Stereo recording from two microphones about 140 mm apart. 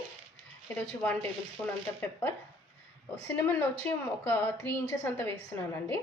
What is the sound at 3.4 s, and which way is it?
A woman's voice, 15° left (ahead or behind).